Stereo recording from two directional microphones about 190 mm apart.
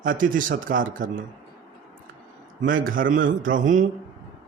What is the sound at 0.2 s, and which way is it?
A man's voice, 45° right (ahead or behind).